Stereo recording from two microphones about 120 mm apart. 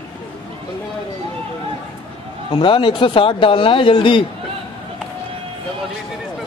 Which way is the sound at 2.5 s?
45° left (ahead or behind).